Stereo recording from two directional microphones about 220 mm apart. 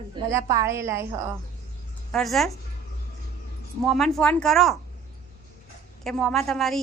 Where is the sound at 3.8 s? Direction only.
Centre (ahead or behind).